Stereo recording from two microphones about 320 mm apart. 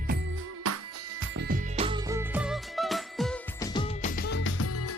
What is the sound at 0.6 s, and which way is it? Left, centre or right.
Music, right.